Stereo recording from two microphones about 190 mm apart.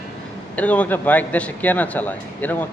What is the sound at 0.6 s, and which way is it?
A man's voice, 10° left (ahead or behind).